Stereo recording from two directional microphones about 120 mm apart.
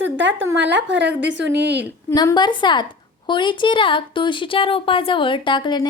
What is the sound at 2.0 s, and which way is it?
A woman's voice, 30° left (ahead or behind).